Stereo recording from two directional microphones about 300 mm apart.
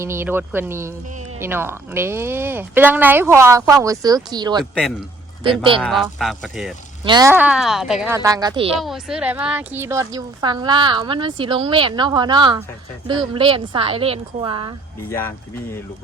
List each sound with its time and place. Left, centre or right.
0.0 s a woman's voice: centre
4.7 s speech: centre
5.4 s speech: centre
5.8 s speech: centre
7.0 s a woman's voice: centre
8.8 s a woman's voice: centre
15.1 s speech: centre